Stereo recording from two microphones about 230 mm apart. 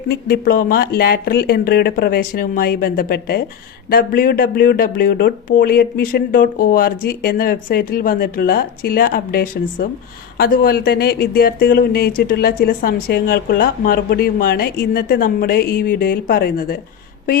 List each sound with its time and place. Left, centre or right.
0.3 s speech: left